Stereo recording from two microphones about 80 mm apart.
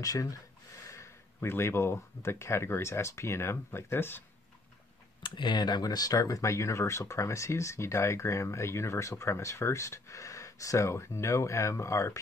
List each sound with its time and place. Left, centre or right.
0.0 s speech: left
5.2 s speech: left